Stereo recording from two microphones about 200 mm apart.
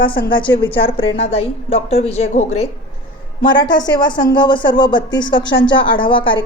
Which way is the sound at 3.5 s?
20° left (ahead or behind).